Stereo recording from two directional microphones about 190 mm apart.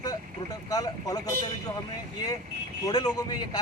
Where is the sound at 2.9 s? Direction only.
20° left (ahead or behind).